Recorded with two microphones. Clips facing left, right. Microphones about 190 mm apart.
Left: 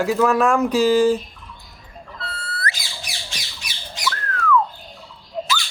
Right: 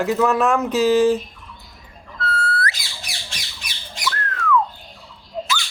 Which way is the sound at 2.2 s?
20° left (ahead or behind).